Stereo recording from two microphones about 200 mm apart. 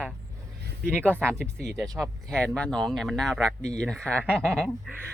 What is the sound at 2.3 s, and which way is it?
Speech, 5° left (ahead or behind).